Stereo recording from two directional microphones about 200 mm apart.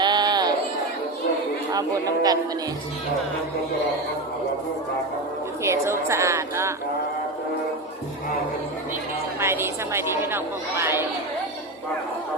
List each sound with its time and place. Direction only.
0.0 s a sound: 20° right (ahead or behind)
1.7 s speech: 20° right (ahead or behind)
5.6 s a woman's voice: 15° right (ahead or behind)
9.4 s a woman's voice: 10° right (ahead or behind)